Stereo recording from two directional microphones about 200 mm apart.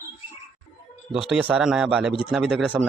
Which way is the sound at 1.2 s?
5° right (ahead or behind).